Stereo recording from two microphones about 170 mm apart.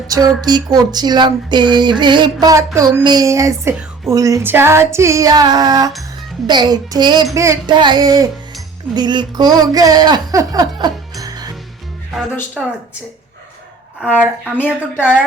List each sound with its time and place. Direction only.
0.1 s a sound: 25° right (ahead or behind)
2.7 s a child's voice: 20° right (ahead or behind)
4.1 s a sound: 20° right (ahead or behind)
10.8 s music: 25° right (ahead or behind)
12.6 s speech: centre (ahead or behind)
14.2 s a child's voice: 10° right (ahead or behind)
14.6 s speech: 10° left (ahead or behind)